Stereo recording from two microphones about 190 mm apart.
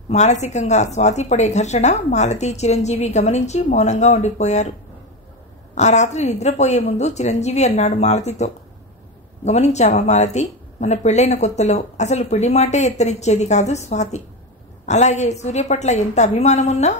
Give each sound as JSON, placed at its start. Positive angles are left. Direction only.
{"t": 0.1, "sound": "a woman's voice", "side_deg": 35}
{"t": 5.8, "sound": "a woman's voice", "side_deg": 35}